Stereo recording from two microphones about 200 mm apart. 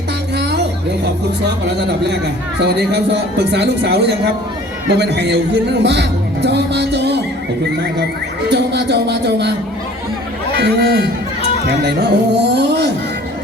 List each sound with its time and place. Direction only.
0.3 s a sound: 55° right (ahead or behind)
2.0 s speech: 60° right (ahead or behind)
8.4 s speech: 55° right (ahead or behind)
10.5 s speech: 55° right (ahead or behind)